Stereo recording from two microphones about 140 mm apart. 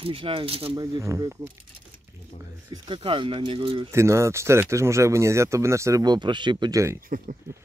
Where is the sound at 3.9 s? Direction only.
20° right (ahead or behind).